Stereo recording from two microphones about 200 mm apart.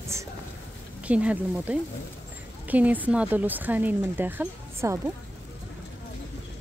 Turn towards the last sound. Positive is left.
turn(degrees=-10)  # may be behind; listen again after turning